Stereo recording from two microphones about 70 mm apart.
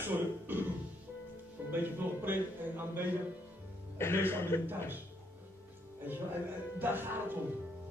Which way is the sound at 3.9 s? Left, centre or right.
Left.